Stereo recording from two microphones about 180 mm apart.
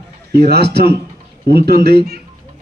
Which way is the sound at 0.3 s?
65° right (ahead or behind).